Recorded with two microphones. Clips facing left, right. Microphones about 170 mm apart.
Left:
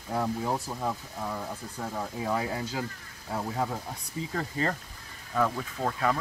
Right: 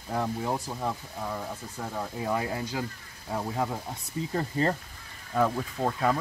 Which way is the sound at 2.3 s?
15° right (ahead or behind).